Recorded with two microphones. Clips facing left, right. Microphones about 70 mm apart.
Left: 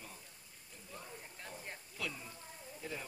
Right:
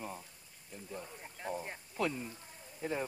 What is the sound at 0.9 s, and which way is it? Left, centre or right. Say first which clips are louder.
Speech: right 3 dB; right.